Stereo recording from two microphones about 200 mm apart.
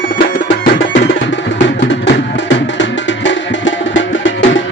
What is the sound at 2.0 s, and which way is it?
Music, 65° left (ahead or behind).